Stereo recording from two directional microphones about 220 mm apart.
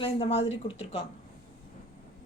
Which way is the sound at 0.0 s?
25° left (ahead or behind).